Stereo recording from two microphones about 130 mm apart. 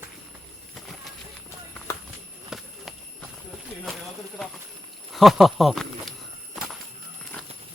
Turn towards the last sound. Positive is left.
turn(degrees=0)  # may be behind; listen again after turning